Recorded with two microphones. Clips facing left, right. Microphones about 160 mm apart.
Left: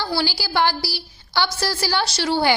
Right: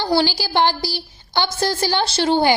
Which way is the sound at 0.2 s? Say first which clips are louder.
Right 3 dB; 20° right (ahead or behind).